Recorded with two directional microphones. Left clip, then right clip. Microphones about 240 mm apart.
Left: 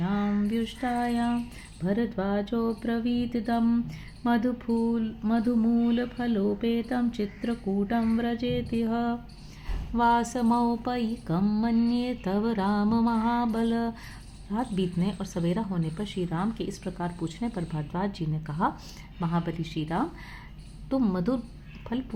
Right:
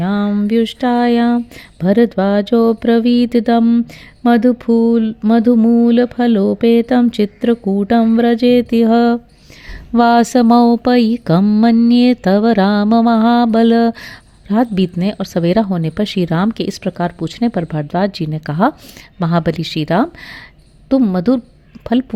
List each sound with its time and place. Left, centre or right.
0.0 s mantra: right
1.8 s speech: right